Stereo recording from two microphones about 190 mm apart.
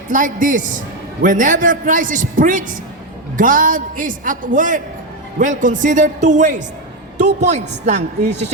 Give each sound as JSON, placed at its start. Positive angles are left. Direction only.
{"t": 0.1, "sound": "a man's voice", "side_deg": -45}